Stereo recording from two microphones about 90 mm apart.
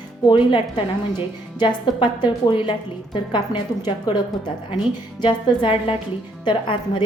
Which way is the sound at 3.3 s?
55° left (ahead or behind).